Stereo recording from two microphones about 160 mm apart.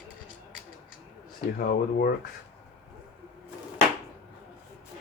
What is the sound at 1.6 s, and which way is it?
Speech, 70° left (ahead or behind).